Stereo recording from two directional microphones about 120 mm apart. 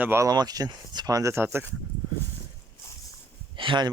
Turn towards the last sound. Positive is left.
turn(degrees=-40)  # may be behind; listen again after turning